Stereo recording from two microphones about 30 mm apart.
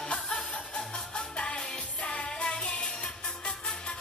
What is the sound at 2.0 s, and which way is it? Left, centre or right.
Music, left.